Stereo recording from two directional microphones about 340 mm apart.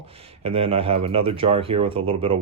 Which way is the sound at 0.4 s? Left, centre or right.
Centre.